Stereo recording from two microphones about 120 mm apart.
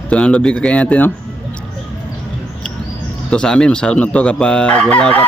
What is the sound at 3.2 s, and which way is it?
Speech, 5° left (ahead or behind).